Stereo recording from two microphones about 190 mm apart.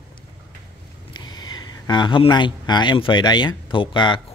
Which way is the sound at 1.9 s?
25° left (ahead or behind).